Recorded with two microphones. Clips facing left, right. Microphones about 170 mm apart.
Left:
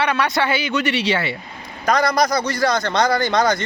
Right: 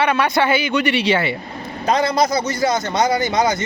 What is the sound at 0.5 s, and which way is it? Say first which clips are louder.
Speech: right 3 dB; 50° right (ahead or behind).